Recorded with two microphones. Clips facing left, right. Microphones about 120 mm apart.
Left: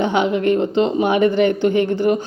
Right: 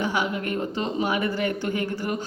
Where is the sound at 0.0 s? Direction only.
25° left (ahead or behind).